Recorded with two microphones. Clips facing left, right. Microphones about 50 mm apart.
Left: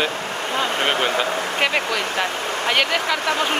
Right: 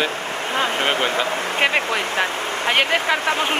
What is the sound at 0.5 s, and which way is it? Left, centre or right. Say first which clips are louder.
Speech: even; right.